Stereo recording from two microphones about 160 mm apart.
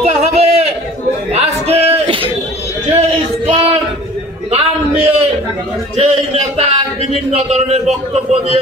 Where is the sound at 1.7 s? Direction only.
40° right (ahead or behind).